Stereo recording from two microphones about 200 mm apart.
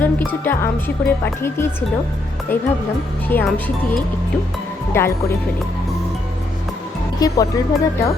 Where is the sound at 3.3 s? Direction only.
10° left (ahead or behind).